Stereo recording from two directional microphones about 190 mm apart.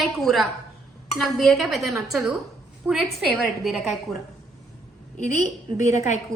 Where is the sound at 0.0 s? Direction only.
Centre (ahead or behind).